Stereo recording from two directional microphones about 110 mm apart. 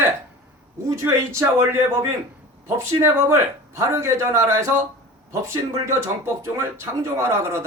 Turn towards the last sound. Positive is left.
turn(degrees=-25)  # may be behind; listen again after turning